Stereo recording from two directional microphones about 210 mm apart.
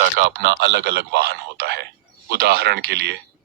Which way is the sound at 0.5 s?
55° right (ahead or behind).